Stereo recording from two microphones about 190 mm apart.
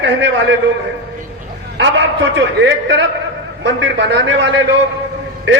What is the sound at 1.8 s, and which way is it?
A man's voice, 70° right (ahead or behind).